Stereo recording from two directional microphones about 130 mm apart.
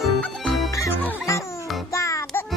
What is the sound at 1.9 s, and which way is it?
Music, 25° left (ahead or behind).